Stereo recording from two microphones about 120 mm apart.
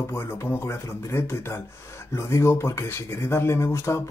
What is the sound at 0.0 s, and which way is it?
Speech, 20° left (ahead or behind).